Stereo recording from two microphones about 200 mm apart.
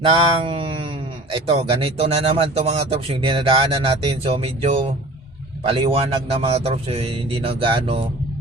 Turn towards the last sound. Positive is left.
turn(degrees=-25)  # may be behind; listen again after turning